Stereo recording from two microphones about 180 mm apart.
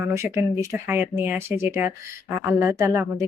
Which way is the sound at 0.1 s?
15° right (ahead or behind).